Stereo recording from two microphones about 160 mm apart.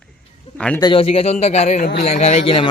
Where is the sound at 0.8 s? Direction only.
35° left (ahead or behind).